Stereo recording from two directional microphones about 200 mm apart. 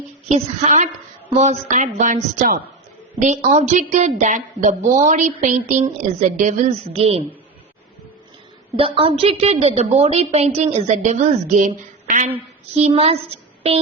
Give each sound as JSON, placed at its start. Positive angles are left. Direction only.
{"t": 0.3, "sound": "a woman's voice", "side_deg": -30}
{"t": 8.8, "sound": "a woman's voice", "side_deg": -25}
{"t": 13.6, "sound": "a sound", "side_deg": -30}